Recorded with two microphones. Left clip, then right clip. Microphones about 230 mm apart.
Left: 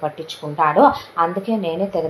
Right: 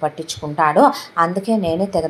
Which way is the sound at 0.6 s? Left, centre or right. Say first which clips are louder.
Even; right.